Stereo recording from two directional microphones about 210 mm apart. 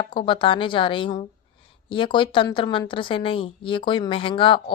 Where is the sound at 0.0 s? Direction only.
25° left (ahead or behind).